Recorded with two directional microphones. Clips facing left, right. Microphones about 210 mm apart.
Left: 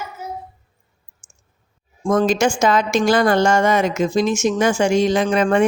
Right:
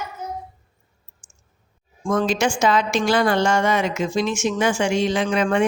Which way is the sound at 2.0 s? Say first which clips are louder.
Left 4 dB; 45° left (ahead or behind).